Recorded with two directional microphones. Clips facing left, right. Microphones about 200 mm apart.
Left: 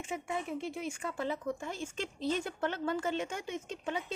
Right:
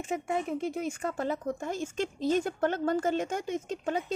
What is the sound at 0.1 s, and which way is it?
Speech, 45° right (ahead or behind).